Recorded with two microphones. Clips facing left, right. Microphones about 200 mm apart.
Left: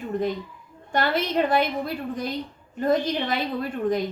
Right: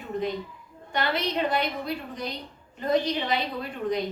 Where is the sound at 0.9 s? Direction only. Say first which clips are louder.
Left 4 dB; 50° left (ahead or behind).